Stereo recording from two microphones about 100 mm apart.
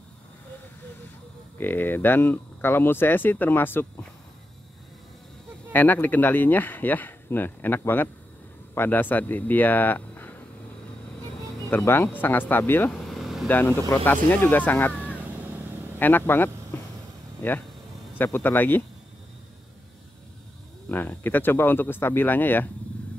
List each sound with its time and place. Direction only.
1.6 s speech: 20° left (ahead or behind)
5.7 s speech: 15° left (ahead or behind)
11.7 s speech: 20° left (ahead or behind)
12.9 s vehicle: centre (ahead or behind)
13.5 s speech: 20° left (ahead or behind)
16.0 s speech: 20° left (ahead or behind)
16.7 s a sound: 20° left (ahead or behind)
17.4 s speech: 20° left (ahead or behind)
20.9 s speech: 20° left (ahead or behind)